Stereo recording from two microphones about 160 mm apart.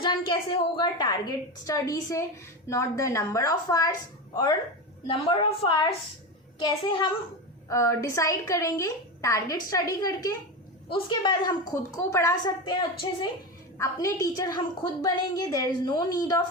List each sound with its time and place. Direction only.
0.0 s a woman's voice: 30° left (ahead or behind)
5.0 s a woman's voice: 30° left (ahead or behind)
7.7 s a woman's voice: 15° left (ahead or behind)